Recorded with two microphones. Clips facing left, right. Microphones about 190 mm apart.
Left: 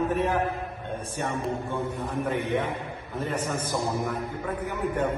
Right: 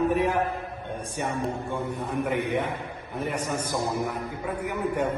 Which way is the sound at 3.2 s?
15° right (ahead or behind).